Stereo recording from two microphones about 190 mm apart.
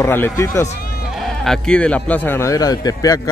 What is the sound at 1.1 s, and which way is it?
Speech, centre (ahead or behind).